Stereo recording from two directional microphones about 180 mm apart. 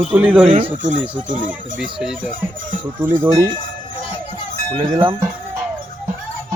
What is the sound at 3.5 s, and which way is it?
Music, 50° right (ahead or behind).